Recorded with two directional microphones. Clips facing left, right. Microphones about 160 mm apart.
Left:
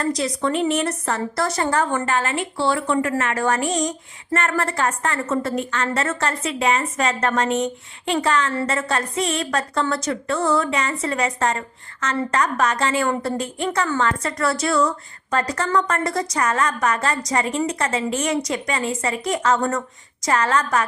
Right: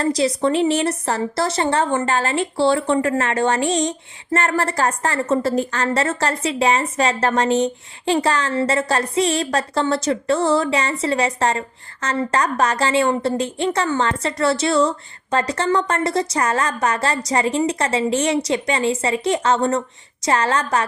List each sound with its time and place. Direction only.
0.0 s a woman's voice: 30° right (ahead or behind)